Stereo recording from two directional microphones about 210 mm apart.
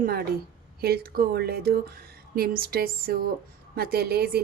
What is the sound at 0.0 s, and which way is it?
A woman's voice, 45° right (ahead or behind).